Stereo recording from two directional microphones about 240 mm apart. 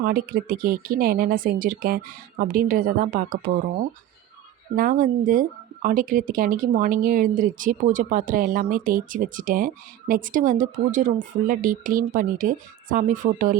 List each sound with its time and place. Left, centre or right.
0.0 s speech: right
4.8 s speech: right